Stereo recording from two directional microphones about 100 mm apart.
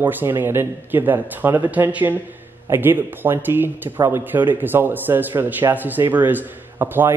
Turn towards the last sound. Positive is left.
turn(degrees=-20)  # may be behind; listen again after turning